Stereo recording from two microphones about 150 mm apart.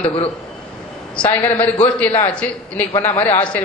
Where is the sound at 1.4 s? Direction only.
40° left (ahead or behind).